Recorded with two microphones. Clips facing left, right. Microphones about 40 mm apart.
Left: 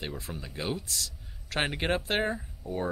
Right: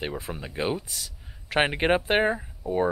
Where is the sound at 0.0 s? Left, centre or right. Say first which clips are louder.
Right 5 dB; right.